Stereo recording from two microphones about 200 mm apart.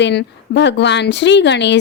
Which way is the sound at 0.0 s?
60° left (ahead or behind).